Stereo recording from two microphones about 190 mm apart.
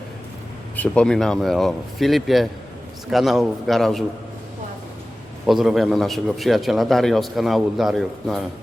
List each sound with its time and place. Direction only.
0.8 s a man's voice: 5° left (ahead or behind)
5.5 s a man's voice: centre (ahead or behind)